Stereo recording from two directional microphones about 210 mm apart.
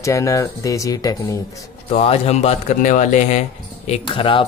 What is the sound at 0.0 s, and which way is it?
Speech, 15° left (ahead or behind).